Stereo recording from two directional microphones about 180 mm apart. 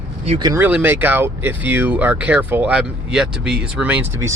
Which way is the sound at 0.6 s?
10° right (ahead or behind).